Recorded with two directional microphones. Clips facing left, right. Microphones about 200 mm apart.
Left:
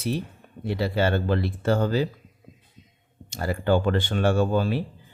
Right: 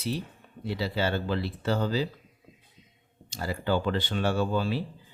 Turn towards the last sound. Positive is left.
turn(degrees=50)  # may be behind; listen again after turning